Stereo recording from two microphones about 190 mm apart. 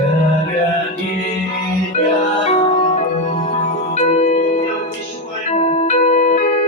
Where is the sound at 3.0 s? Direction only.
35° left (ahead or behind).